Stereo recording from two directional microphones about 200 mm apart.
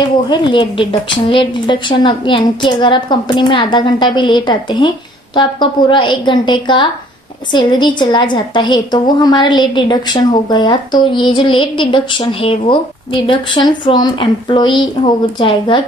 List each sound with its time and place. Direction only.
0.3 s speech: 25° left (ahead or behind)